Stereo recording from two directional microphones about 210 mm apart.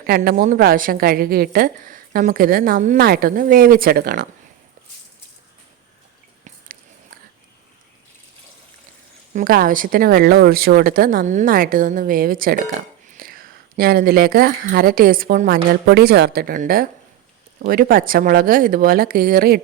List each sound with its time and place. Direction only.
0.0 s a woman's voice: 45° right (ahead or behind)
9.3 s a woman's voice: 45° right (ahead or behind)